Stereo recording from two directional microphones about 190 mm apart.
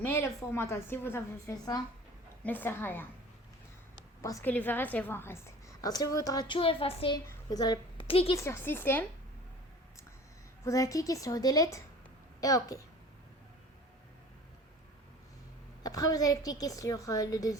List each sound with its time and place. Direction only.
0.0 s a woman's voice: 10° left (ahead or behind)
4.2 s a woman's voice: 15° left (ahead or behind)
8.4 s a woman's voice: 15° left (ahead or behind)
10.6 s a woman's voice: 15° left (ahead or behind)
15.8 s a woman's voice: 20° left (ahead or behind)